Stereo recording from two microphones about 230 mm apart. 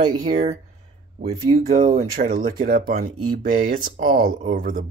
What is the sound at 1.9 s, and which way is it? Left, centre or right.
Speech, right.